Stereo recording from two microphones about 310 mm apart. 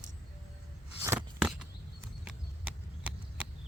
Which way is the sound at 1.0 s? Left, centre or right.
Centre.